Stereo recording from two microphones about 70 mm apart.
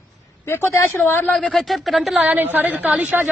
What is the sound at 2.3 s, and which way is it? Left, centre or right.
A woman's voice, right.